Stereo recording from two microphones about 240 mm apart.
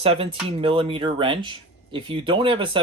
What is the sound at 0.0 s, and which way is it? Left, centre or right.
Speech, right.